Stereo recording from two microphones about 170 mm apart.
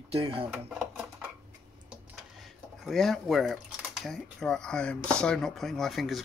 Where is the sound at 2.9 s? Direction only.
Centre (ahead or behind).